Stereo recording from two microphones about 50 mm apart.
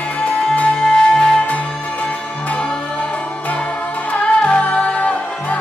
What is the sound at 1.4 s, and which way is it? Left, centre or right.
Music, left.